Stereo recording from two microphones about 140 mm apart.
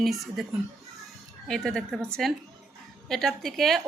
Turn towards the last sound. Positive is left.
turn(degrees=0)  # may be behind; listen again after turning